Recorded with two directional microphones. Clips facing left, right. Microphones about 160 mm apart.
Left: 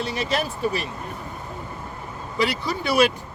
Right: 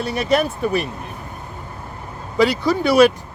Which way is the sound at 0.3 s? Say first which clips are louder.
Right 9 dB; 60° right (ahead or behind).